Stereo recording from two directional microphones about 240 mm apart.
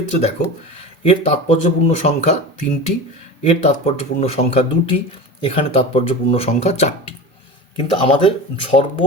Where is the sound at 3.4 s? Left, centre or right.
Left.